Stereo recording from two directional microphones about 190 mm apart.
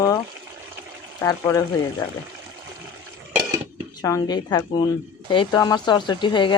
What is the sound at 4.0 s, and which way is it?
Speech, 20° left (ahead or behind).